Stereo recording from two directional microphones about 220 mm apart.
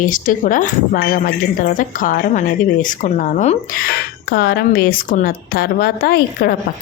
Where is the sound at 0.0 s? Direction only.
40° left (ahead or behind).